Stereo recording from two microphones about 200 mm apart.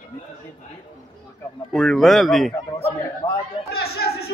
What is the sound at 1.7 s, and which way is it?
Speech, centre (ahead or behind).